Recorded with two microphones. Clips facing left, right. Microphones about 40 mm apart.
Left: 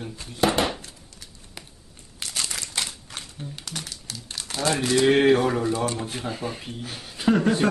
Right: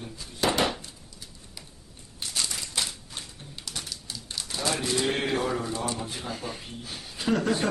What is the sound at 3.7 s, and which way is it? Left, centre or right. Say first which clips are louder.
Speech: right 2 dB; left.